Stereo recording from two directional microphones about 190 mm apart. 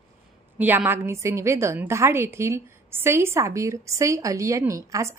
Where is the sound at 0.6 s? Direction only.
10° right (ahead or behind).